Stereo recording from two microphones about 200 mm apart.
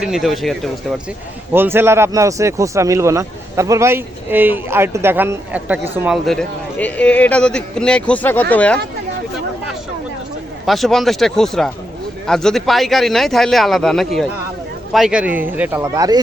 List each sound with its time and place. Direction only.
0.0 s speech: centre (ahead or behind)
1.5 s speech: 10° right (ahead or behind)
6.2 s speech: 5° left (ahead or behind)
10.7 s speech: centre (ahead or behind); by 16.2 s 20° right (ahead or behind)